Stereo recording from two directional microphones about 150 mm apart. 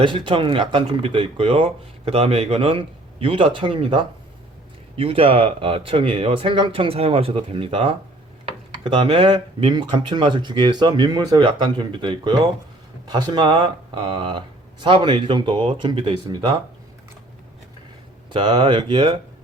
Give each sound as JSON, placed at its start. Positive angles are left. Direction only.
{"t": 0.0, "sound": "speech", "side_deg": -35}
{"t": 18.3, "sound": "speech", "side_deg": -30}